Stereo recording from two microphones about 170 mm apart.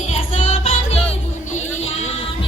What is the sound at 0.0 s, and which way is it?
Music, 40° left (ahead or behind).